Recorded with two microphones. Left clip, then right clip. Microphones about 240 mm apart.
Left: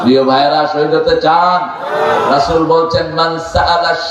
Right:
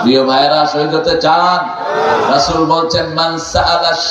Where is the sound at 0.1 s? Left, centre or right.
Right.